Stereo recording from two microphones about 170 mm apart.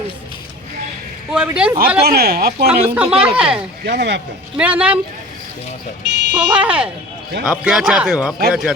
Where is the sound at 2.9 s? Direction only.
10° right (ahead or behind).